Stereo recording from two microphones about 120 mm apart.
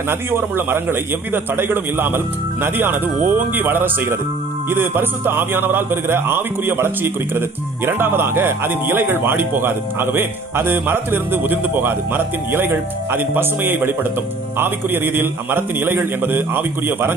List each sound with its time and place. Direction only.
0.1 s a man's voice: 20° right (ahead or behind)